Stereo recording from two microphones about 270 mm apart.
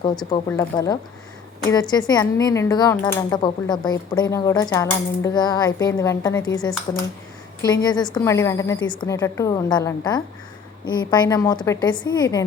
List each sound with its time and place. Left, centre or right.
0.3 s speech: centre